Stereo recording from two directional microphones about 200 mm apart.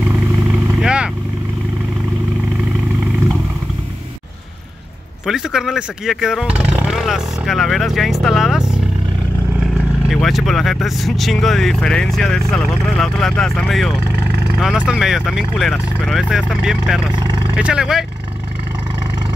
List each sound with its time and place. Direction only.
0.7 s vehicle: 5° right (ahead or behind)
5.2 s speech: 5° right (ahead or behind)
17.1 s speech: 20° right (ahead or behind)
17.6 s speech: 5° right (ahead or behind)